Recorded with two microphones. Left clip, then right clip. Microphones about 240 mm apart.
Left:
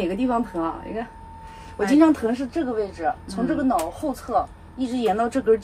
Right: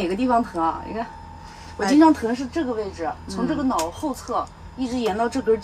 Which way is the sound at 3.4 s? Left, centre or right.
Centre.